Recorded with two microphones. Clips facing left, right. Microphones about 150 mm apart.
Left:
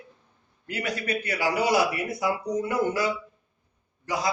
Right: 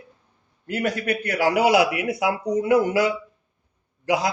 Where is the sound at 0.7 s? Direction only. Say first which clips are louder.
Right 5 dB; 50° right (ahead or behind).